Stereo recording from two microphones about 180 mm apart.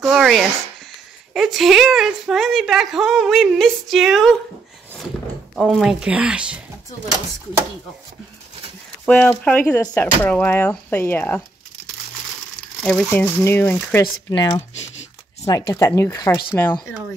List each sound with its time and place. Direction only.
0.0 s a woman's voice: centre (ahead or behind)
5.6 s a woman's voice: centre (ahead or behind)
9.0 s speech: 5° left (ahead or behind)
12.8 s speech: 10° left (ahead or behind)
14.3 s speech: 25° left (ahead or behind)